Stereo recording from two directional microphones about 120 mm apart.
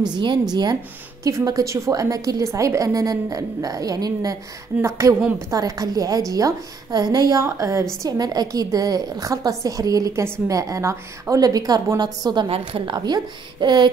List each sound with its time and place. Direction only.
0.0 s a woman's voice: 40° right (ahead or behind)
12.4 s a woman's voice: 50° right (ahead or behind)